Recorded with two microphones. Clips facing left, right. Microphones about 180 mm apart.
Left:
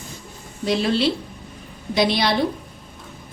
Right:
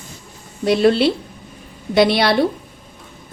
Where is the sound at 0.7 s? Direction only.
60° right (ahead or behind).